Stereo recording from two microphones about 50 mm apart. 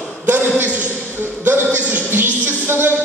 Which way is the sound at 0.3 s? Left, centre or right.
Right.